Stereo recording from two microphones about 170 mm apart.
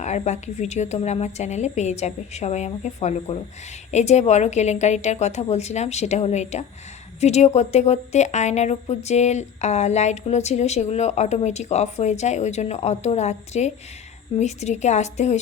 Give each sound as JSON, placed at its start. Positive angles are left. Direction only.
{"t": 0.0, "sound": "a woman's voice", "side_deg": 45}